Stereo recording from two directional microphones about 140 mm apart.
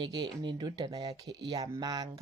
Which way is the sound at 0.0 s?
35° right (ahead or behind).